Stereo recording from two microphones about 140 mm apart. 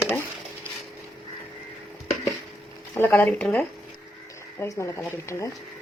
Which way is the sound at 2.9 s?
15° left (ahead or behind).